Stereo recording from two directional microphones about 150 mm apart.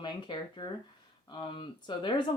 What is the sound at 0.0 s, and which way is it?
Speech, 30° left (ahead or behind).